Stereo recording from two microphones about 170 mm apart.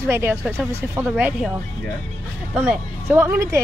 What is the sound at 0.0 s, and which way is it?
Speech, 15° right (ahead or behind).